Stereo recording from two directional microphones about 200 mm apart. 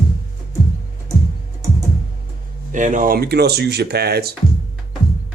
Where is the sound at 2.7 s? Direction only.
40° right (ahead or behind).